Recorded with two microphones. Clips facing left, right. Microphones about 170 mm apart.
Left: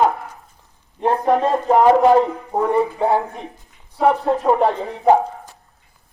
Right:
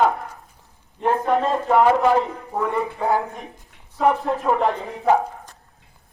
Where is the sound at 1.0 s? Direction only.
35° left (ahead or behind).